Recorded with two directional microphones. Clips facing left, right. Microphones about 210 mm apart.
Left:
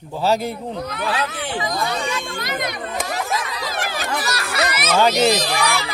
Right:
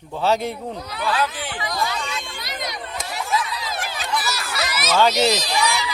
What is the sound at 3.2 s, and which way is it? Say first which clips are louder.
Chatter: even; 45° left (ahead or behind).